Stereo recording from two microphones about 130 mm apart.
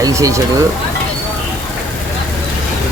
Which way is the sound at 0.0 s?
25° right (ahead or behind).